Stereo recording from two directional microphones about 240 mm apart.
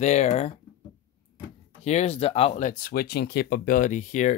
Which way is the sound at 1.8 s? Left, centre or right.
Left.